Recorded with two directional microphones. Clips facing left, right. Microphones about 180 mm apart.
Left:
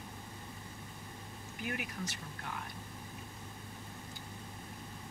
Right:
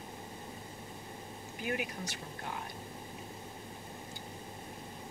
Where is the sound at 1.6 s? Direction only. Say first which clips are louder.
Right 4 dB; 25° right (ahead or behind).